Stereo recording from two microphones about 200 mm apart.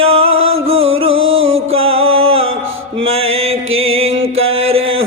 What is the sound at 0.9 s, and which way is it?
Music, 80° right.